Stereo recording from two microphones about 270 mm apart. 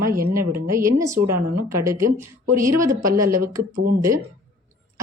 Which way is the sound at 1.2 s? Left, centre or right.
Right.